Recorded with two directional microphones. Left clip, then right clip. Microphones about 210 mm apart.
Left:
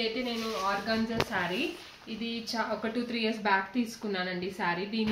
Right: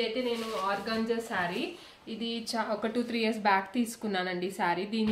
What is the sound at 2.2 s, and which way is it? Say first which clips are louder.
Speech: even; 55° right (ahead or behind).